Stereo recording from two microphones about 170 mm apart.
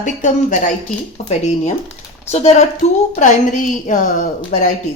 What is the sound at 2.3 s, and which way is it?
Speech, 40° left (ahead or behind).